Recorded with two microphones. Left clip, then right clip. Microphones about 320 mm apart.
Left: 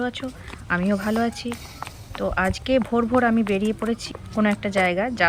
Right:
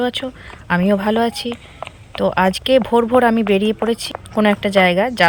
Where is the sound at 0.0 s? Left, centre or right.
Centre.